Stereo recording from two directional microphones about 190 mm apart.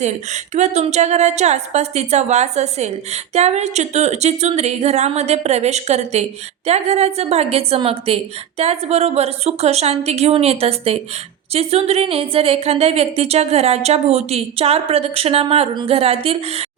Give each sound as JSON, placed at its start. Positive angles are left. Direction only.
{"t": 0.5, "sound": "a woman's voice", "side_deg": -35}